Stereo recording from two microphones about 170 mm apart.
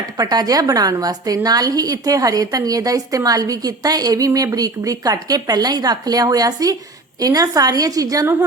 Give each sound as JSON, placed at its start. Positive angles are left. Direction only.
{"t": 0.2, "sound": "a woman's voice", "side_deg": -20}